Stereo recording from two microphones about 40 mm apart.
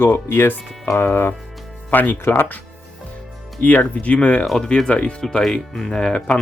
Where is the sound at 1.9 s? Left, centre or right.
Left.